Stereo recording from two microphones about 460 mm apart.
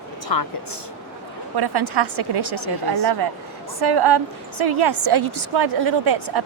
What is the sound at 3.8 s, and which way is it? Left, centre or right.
A woman's voice, right.